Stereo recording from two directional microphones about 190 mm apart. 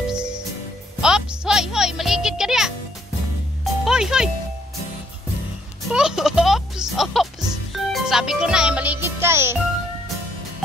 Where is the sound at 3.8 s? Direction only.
5° right (ahead or behind).